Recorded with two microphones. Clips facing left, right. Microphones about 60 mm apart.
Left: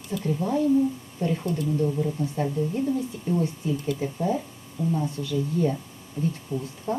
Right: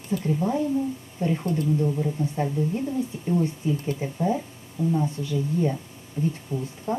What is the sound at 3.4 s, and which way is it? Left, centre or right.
Speech, right.